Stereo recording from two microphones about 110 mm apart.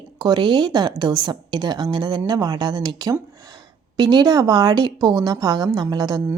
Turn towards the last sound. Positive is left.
turn(degrees=-40)  # may be behind; listen again after turning